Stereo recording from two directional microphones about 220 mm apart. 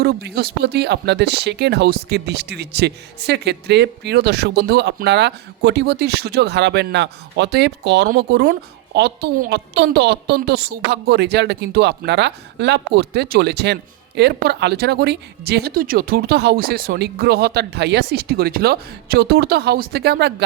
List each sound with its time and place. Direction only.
0.0 s speech: 45° right (ahead or behind)